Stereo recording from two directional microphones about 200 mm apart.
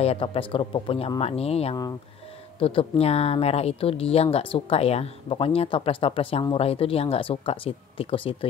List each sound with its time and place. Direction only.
0.0 s speech: 30° left (ahead or behind)